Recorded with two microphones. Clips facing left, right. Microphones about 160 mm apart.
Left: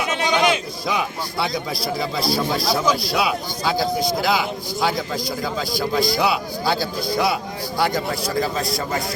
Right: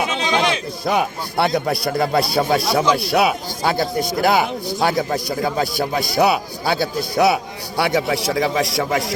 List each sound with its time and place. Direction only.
0.9 s a man's voice: 60° right (ahead or behind); by 9.0 s 90° right